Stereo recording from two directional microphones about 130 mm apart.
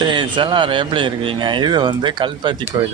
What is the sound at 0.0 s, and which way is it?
A man's voice, 35° right (ahead or behind).